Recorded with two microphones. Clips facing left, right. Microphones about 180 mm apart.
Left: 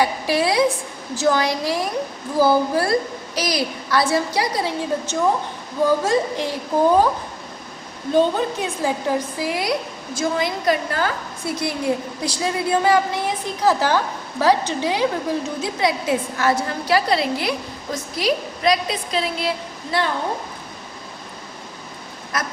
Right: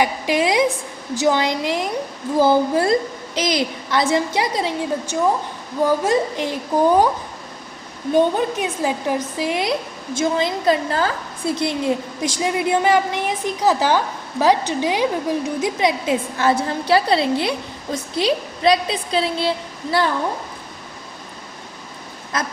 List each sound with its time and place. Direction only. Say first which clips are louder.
0.0 s a woman's voice: right 1 dB; 20° right (ahead or behind)
8.1 s a woman's voice: right 1 dB; 15° right (ahead or behind)